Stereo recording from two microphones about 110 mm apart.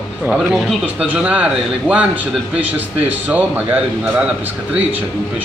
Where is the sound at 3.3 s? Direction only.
15° right (ahead or behind).